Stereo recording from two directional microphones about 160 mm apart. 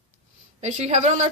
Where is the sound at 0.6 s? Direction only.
45° right (ahead or behind).